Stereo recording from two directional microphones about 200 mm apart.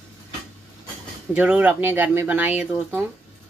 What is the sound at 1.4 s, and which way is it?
Speech, 10° right (ahead or behind).